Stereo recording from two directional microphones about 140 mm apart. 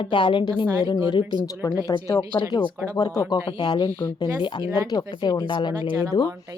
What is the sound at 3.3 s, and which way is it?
Speech, 30° left (ahead or behind).